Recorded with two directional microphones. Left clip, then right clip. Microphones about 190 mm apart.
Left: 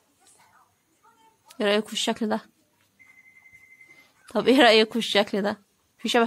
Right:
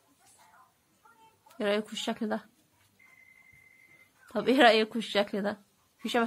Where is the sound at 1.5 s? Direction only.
40° left (ahead or behind).